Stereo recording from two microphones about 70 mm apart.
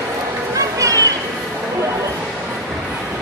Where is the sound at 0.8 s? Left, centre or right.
Right.